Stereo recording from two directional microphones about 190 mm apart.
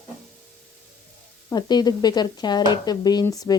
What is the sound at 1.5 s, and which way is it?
Speech, 20° left (ahead or behind).